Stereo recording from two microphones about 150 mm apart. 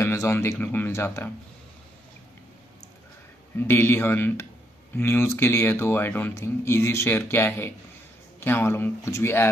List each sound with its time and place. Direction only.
0.0 s speech: 15° left (ahead or behind)
3.5 s speech: 15° left (ahead or behind)